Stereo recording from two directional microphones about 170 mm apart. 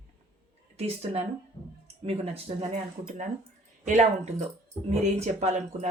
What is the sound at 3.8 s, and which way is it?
Speech, 45° right (ahead or behind).